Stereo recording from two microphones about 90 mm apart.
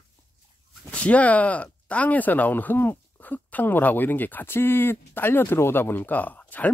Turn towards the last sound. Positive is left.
turn(degrees=20)  # may be behind; listen again after turning